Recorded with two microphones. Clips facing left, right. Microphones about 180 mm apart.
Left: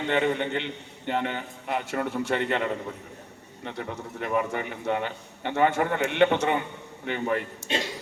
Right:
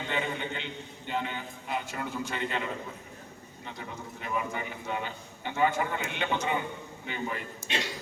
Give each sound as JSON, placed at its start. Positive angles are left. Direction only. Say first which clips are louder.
{"t": 0.0, "sound": "a man's voice", "louder": "left 8 dB", "side_deg": 70}